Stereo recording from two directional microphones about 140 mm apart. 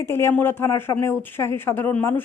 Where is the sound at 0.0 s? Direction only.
20° left (ahead or behind).